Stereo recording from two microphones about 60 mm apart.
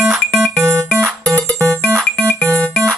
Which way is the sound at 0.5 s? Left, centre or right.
Right.